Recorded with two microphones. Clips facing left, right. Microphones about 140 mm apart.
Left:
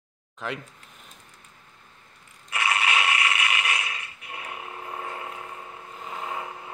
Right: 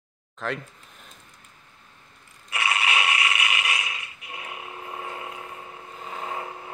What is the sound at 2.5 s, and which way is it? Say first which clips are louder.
Mechanisms: left 1 dB; 25° right (ahead or behind).